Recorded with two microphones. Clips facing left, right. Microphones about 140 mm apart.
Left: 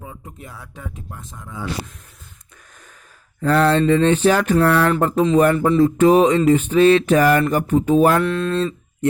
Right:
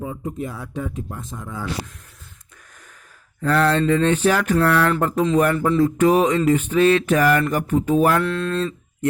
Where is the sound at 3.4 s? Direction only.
30° left (ahead or behind).